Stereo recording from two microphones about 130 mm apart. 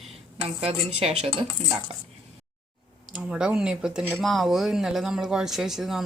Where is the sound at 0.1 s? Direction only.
50° right (ahead or behind).